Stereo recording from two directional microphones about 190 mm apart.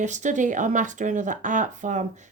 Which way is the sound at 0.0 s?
40° right (ahead or behind).